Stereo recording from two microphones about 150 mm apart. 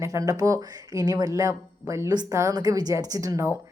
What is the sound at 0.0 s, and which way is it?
Speech, 20° right (ahead or behind).